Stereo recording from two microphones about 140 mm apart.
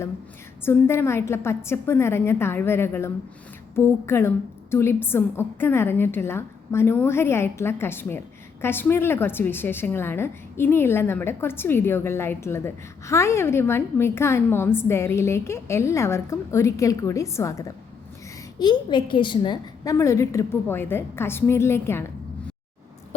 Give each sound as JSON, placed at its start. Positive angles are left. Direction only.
{"t": 0.6, "sound": "a woman's voice", "side_deg": 15}
{"t": 18.6, "sound": "a woman's voice", "side_deg": 30}